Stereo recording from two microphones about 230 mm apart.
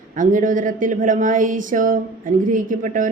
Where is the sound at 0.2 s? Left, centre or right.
Right.